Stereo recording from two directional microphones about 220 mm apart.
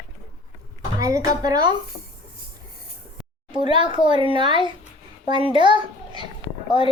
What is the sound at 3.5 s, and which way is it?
A woman's voice, 20° right (ahead or behind).